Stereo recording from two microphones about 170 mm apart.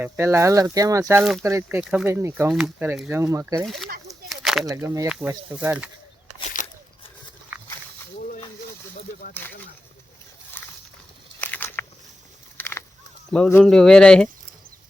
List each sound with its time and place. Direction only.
0.0 s speech: 15° right (ahead or behind)
1.2 s speech: centre (ahead or behind)
1.5 s speech: 20° right (ahead or behind)
1.8 s speech: 5° right (ahead or behind)
2.0 s speech: 15° right (ahead or behind)
2.5 s speech: 5° right (ahead or behind)
3.6 s speech: centre (ahead or behind)
4.3 s a sound: centre (ahead or behind)
4.7 s speech: 20° right (ahead or behind)
5.0 s speech: 5° right (ahead or behind)
6.2 s a sound: 50° left (ahead or behind)
9.4 s speech: 10° left (ahead or behind)
11.3 s a sound: 10° left (ahead or behind)
13.3 s speech: 10° left (ahead or behind)